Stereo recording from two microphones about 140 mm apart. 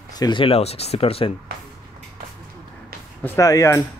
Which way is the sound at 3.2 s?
20° left (ahead or behind).